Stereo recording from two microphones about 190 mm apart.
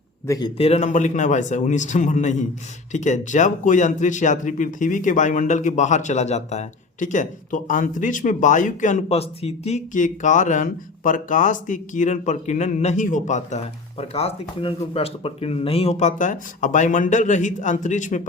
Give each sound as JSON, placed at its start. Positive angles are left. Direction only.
{"t": 0.3, "sound": "speech", "side_deg": 20}